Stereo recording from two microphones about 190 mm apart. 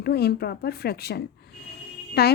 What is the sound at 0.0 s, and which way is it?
A woman's voice, 60° left (ahead or behind).